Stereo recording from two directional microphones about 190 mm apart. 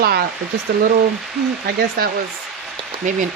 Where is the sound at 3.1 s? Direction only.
40° right (ahead or behind).